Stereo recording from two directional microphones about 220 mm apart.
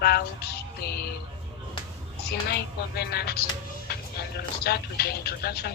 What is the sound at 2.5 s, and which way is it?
Speech, 45° left (ahead or behind).